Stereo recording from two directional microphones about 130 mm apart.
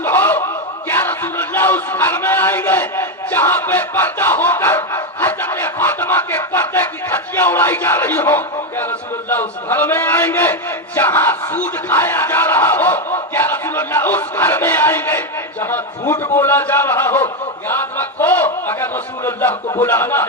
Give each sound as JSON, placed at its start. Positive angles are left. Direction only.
{"t": 0.0, "sound": "a man's voice", "side_deg": 15}